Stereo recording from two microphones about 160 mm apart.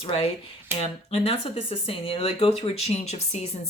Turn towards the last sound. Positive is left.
turn(degrees=45)  # may be behind; listen again after turning